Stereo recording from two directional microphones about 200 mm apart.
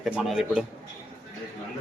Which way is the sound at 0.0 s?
Centre (ahead or behind).